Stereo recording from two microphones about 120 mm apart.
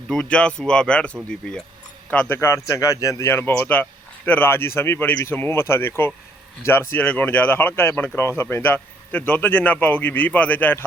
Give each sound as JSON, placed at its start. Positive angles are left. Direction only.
{"t": 0.1, "sound": "a man's voice", "side_deg": 5}
{"t": 2.4, "sound": "a man's voice", "side_deg": 25}